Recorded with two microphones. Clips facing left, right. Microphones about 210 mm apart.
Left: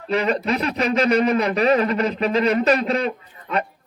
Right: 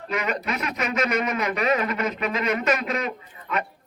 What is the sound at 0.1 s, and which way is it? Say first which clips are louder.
A man's voice: left 7 dB; 30° left (ahead or behind).